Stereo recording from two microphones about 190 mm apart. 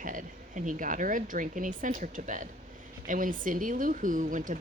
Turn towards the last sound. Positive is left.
turn(degrees=-45)  # may be behind; listen again after turning